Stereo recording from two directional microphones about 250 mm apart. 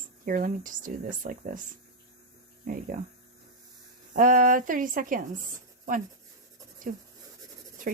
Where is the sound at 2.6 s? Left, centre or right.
Right.